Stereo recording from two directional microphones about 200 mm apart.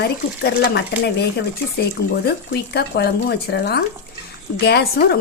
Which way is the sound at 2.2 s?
55° left (ahead or behind).